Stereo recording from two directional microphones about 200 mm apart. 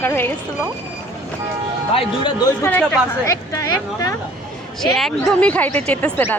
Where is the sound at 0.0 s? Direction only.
10° left (ahead or behind).